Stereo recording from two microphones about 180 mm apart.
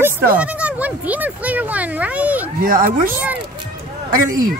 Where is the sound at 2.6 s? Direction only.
50° right (ahead or behind).